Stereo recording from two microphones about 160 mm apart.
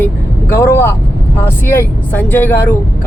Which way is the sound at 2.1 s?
10° left (ahead or behind).